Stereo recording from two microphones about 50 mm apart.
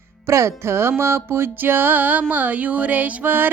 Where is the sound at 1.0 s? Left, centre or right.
Right.